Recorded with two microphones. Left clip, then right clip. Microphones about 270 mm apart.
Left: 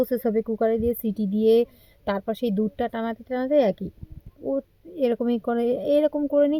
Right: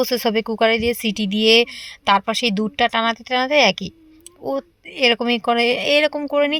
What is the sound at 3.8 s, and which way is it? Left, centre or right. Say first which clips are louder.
Speech: right 4 dB; right.